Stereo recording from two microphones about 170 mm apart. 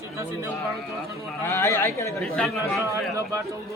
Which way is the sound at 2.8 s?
15° right (ahead or behind).